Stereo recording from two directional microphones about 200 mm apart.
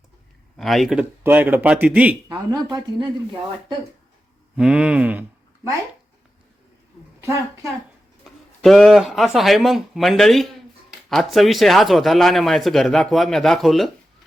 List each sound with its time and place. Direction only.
0.5 s speech: centre (ahead or behind)
2.3 s speech: 20° right (ahead or behind)
4.5 s speech: 5° right (ahead or behind)
7.2 s a woman's voice: 15° right (ahead or behind)
8.2 s speech: centre (ahead or behind)